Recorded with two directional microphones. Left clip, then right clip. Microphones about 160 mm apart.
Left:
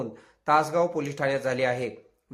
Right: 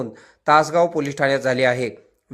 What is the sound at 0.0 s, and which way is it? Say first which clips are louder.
Speech: right 8 dB; 30° right (ahead or behind).